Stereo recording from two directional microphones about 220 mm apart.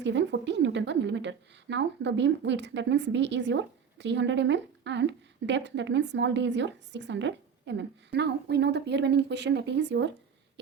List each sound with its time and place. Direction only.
0.0 s a woman's voice: 55° right (ahead or behind)